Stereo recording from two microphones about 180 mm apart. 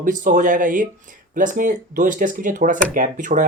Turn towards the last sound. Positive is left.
turn(degrees=-45)  # may be behind; listen again after turning